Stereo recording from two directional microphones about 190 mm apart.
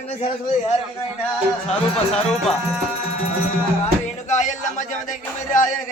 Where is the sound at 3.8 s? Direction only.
40° left (ahead or behind).